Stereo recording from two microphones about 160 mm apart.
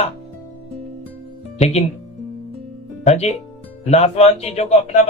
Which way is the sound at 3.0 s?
40° left (ahead or behind).